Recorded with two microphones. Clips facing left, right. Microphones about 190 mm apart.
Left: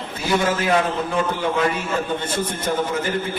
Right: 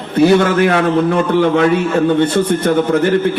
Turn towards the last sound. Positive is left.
turn(degrees=-65)  # may be behind; listen again after turning